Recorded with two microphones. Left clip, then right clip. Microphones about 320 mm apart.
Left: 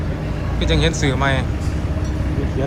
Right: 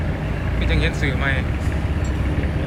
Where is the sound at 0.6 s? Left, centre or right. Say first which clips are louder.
Left 5 dB; centre.